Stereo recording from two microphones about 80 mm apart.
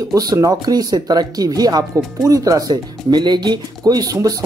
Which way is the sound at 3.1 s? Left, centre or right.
Right.